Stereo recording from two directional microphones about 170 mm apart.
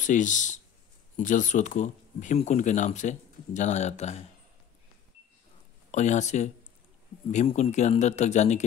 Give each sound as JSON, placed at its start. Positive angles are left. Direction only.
{"t": 0.0, "sound": "speech", "side_deg": 45}
{"t": 5.9, "sound": "speech", "side_deg": 45}